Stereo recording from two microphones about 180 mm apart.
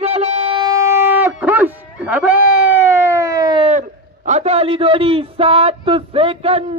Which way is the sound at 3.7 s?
40° right (ahead or behind).